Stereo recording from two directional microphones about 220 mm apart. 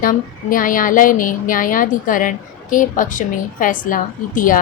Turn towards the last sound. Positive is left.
turn(degrees=35)  # may be behind; listen again after turning